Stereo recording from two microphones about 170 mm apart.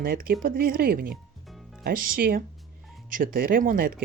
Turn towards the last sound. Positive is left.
turn(degrees=-55)  # may be behind; listen again after turning